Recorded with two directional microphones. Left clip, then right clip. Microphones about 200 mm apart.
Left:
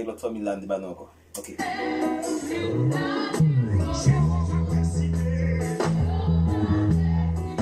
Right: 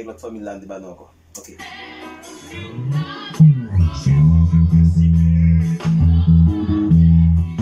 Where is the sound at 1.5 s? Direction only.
35° left (ahead or behind).